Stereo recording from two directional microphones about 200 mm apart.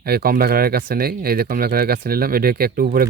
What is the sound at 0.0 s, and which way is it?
Speech, 50° right (ahead or behind).